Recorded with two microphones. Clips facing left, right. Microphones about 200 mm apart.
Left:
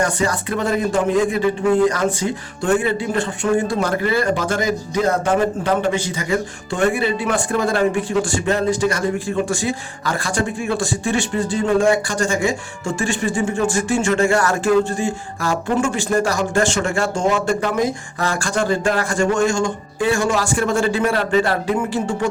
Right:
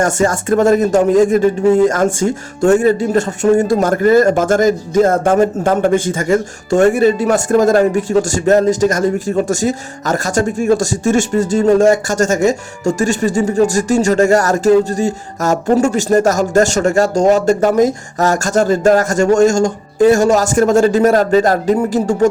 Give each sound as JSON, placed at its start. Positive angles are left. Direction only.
{"t": 0.0, "sound": "speech", "side_deg": -45}